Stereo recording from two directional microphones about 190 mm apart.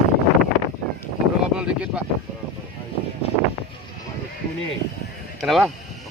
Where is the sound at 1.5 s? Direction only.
5° right (ahead or behind).